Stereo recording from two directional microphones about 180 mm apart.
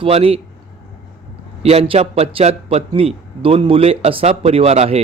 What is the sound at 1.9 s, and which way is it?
Speech, 35° right (ahead or behind).